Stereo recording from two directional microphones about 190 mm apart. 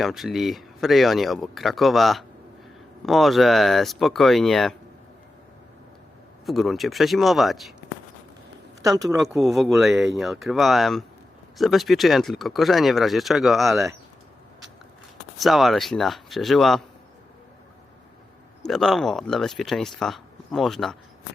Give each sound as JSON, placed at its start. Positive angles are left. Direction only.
{"t": 0.0, "sound": "speech", "side_deg": 0}
{"t": 6.4, "sound": "speech", "side_deg": 0}
{"t": 8.8, "sound": "speech", "side_deg": -20}
{"t": 9.4, "sound": "speech", "side_deg": 0}
{"t": 15.4, "sound": "speech", "side_deg": 0}
{"t": 18.6, "sound": "speech", "side_deg": 0}